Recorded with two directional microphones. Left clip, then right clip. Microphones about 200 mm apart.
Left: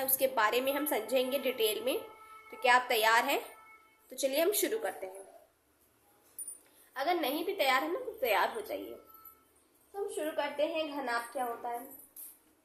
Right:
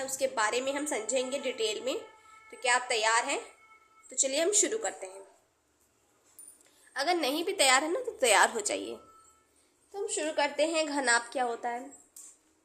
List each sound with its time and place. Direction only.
0.0 s a woman's voice: centre (ahead or behind)
6.9 s a woman's voice: 25° right (ahead or behind)
9.9 s a woman's voice: 40° right (ahead or behind)